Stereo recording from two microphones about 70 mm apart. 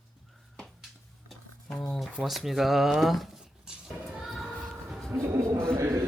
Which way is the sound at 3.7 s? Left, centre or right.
Centre.